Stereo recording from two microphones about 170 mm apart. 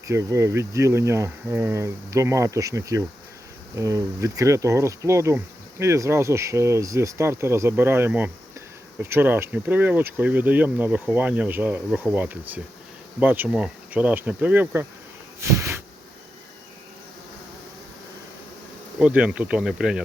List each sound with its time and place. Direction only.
0.1 s speech: 15° right (ahead or behind)
15.4 s a sound: 15° right (ahead or behind)
18.9 s speech: 5° right (ahead or behind)